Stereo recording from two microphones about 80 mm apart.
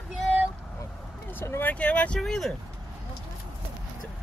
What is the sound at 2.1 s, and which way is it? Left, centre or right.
Speech, centre.